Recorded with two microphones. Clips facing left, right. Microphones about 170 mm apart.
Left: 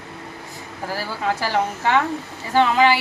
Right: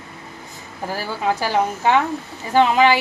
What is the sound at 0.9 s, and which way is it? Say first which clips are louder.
A woman's voice: right 2 dB; 15° right (ahead or behind).